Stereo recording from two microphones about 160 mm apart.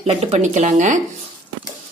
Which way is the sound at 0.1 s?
40° right (ahead or behind).